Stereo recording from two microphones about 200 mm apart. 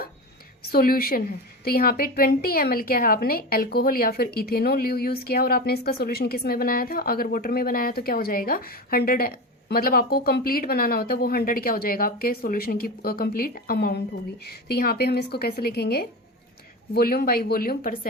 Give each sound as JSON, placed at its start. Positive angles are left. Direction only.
{"t": 0.6, "sound": "a woman's voice", "side_deg": 45}